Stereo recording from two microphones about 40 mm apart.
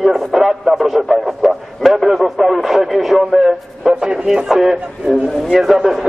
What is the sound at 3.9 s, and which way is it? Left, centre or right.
Speech, right.